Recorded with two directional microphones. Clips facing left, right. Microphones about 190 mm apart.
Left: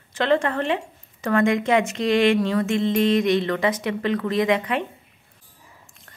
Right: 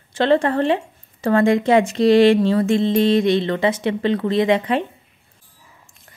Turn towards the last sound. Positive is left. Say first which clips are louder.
# right 4 dB
turn(degrees=-30)  # may be behind; listen again after turning